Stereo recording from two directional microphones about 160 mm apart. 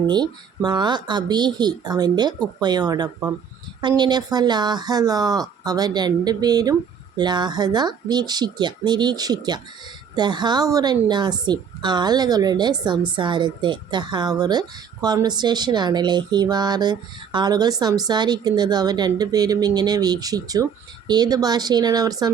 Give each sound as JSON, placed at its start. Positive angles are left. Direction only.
{"t": 0.1, "sound": "speech", "side_deg": -25}